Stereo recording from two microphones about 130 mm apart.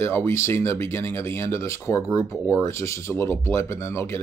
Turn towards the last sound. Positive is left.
turn(degrees=20)  # may be behind; listen again after turning